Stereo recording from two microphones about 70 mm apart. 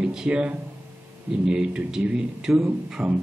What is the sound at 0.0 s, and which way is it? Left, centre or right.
Speech, centre.